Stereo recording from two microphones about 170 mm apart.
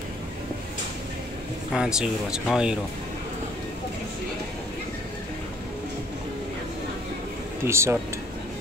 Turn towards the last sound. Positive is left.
turn(degrees=-15)  # may be behind; listen again after turning